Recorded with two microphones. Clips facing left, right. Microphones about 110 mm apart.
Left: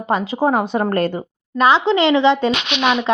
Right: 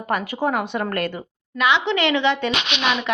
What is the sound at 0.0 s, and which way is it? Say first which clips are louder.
A woman's voice: left 5 dB; 25° left (ahead or behind).